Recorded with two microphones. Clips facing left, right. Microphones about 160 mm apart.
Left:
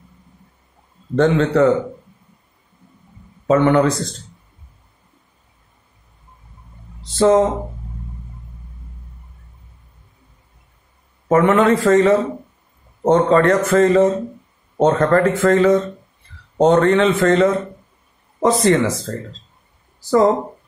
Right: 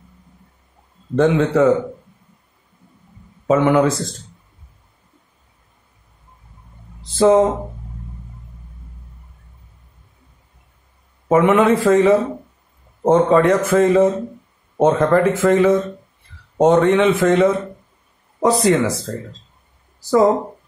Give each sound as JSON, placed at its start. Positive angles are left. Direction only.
{"t": 1.1, "sound": "a man's voice", "side_deg": -5}
{"t": 3.4, "sound": "a man's voice", "side_deg": -5}
{"t": 7.2, "sound": "a man's voice", "side_deg": -10}
{"t": 11.2, "sound": "a man's voice", "side_deg": -10}